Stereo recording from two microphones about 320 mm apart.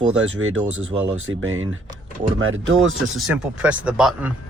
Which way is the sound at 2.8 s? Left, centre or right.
Centre.